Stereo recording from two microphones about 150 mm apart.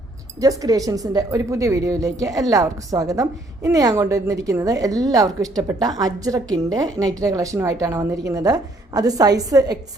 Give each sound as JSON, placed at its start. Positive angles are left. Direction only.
{"t": 0.3, "sound": "speech", "side_deg": -25}